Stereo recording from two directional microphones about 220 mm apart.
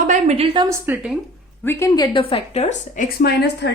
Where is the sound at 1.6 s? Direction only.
10° left (ahead or behind).